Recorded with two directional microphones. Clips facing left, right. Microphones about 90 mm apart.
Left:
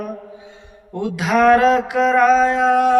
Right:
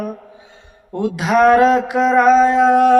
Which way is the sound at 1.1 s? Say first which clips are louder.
Right 2 dB; 20° right (ahead or behind).